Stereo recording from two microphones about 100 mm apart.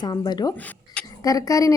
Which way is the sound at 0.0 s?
45° left (ahead or behind).